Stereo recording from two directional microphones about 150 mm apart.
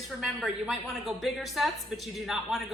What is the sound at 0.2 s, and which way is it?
A woman's voice, 5° right (ahead or behind).